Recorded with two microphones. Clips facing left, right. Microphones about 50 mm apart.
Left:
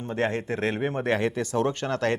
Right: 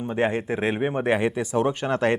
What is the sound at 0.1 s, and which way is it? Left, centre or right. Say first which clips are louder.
A man's voice: right 2 dB; centre.